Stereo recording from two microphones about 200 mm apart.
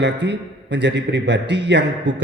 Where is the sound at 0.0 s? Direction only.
60° right (ahead or behind).